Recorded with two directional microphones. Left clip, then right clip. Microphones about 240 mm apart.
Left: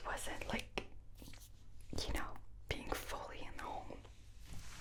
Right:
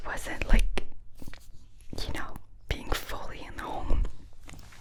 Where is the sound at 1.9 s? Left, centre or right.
Right.